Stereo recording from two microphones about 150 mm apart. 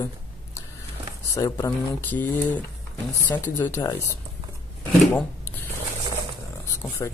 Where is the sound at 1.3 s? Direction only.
20° left (ahead or behind).